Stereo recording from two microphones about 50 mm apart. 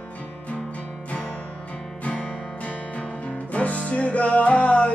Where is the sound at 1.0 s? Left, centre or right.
Left.